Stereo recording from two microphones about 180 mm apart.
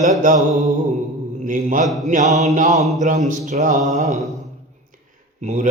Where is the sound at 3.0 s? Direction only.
45° right (ahead or behind).